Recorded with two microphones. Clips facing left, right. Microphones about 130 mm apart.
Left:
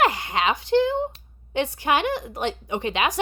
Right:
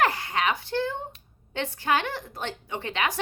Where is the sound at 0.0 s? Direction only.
15° left (ahead or behind).